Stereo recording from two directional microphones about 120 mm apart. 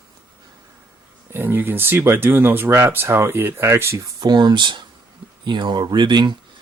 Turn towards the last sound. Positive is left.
turn(degrees=-40)  # may be behind; listen again after turning